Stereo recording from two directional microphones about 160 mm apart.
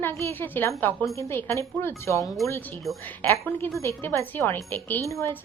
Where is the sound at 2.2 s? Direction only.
Centre (ahead or behind).